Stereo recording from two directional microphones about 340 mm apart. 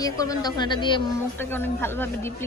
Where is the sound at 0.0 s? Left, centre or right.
Centre.